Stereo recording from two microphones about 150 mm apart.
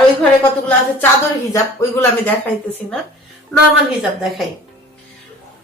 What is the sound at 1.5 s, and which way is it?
Speech, 20° left (ahead or behind).